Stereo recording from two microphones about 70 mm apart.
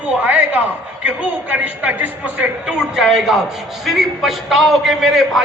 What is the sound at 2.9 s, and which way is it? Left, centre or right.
A man's voice, centre.